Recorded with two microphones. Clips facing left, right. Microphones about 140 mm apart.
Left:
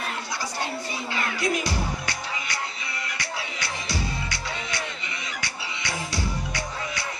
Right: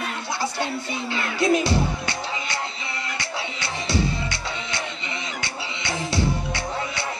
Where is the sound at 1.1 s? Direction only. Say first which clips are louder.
Right 6 dB; 25° right (ahead or behind).